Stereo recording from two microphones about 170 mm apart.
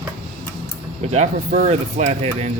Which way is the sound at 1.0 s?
40° right (ahead or behind).